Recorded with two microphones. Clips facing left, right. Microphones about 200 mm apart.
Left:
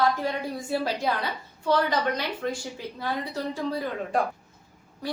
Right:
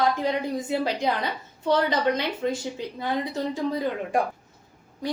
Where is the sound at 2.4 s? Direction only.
15° right (ahead or behind).